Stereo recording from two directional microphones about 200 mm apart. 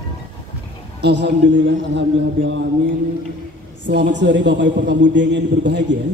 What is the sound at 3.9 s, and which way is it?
A man's voice, 60° right (ahead or behind).